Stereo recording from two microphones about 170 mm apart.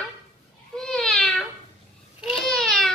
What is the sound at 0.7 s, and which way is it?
Cat, 5° left (ahead or behind).